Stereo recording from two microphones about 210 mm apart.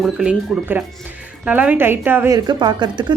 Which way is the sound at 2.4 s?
20° right (ahead or behind).